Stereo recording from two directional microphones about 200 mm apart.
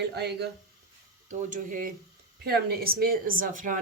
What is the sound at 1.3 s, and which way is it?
Speech, 40° right (ahead or behind).